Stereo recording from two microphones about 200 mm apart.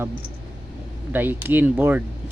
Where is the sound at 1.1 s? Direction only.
10° right (ahead or behind).